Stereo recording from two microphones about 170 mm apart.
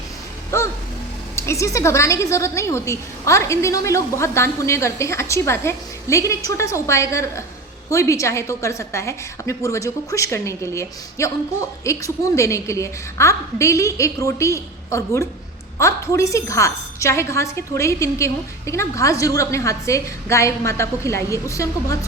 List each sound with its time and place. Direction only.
0.5 s music: 15° left (ahead or behind)
1.4 s a woman's voice: 15° left (ahead or behind)